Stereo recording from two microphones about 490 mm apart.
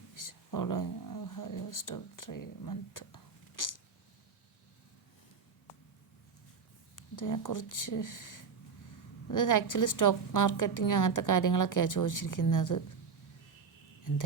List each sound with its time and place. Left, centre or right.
0.1 s speech: left
6.9 s a woman's voice: left
14.1 s a woman's voice: left